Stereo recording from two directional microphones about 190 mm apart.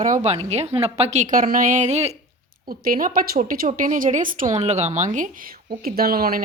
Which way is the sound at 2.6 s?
50° right (ahead or behind).